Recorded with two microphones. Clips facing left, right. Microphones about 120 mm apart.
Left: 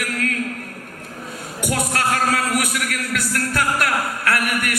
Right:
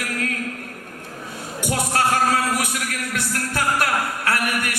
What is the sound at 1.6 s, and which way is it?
Speech, 25° right (ahead or behind).